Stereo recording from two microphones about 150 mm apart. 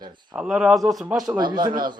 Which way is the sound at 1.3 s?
30° right (ahead or behind).